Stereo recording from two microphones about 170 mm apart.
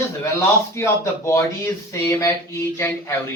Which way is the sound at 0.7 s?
15° left (ahead or behind).